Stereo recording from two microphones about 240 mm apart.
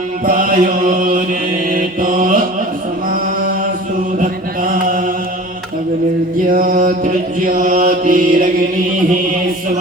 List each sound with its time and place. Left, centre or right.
0.3 s chant: right
1.7 s mantra: right
4.2 s chant: right
6.5 s mantra: right